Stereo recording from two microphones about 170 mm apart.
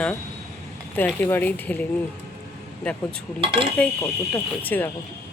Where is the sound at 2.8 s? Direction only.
5° left (ahead or behind).